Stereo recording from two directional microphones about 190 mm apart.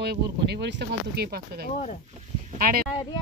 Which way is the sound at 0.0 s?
60° right (ahead or behind).